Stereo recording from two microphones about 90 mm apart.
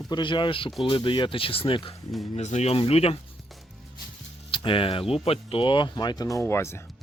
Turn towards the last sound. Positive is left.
turn(degrees=30)  # may be behind; listen again after turning